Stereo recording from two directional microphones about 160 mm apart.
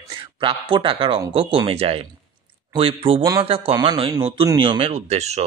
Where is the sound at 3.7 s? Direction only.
25° right (ahead or behind); by 5.5 s 45° right (ahead or behind).